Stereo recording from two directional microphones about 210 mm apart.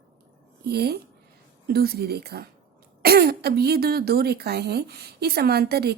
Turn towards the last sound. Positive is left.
turn(degrees=-50)  # may be behind; listen again after turning